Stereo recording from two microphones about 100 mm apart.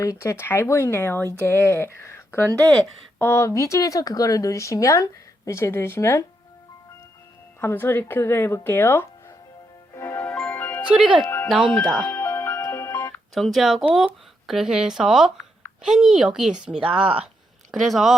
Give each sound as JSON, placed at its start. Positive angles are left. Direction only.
{"t": 0.0, "sound": "speech", "side_deg": 30}
{"t": 2.5, "sound": "speech", "side_deg": -35}
{"t": 3.2, "sound": "speech", "side_deg": 25}
{"t": 7.6, "sound": "speech", "side_deg": 20}
{"t": 9.9, "sound": "music", "side_deg": 25}
{"t": 10.9, "sound": "speech", "side_deg": -5}
{"t": 12.0, "sound": "music", "side_deg": 20}
{"t": 13.3, "sound": "speech", "side_deg": 0}
{"t": 16.8, "sound": "speech", "side_deg": -65}
{"t": 17.7, "sound": "speech", "side_deg": 0}